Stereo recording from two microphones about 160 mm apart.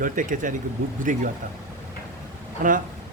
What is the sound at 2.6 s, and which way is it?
Speech, 55° right (ahead or behind).